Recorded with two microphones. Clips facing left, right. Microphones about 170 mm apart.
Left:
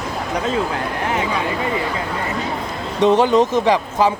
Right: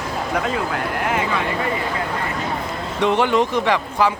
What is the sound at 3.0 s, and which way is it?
Speech, 20° left (ahead or behind).